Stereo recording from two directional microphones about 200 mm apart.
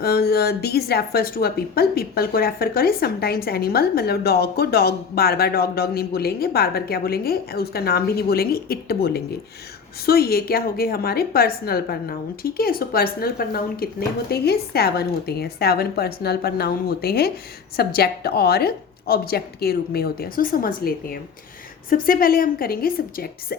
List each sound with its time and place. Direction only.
0.0 s speech: 50° left (ahead or behind)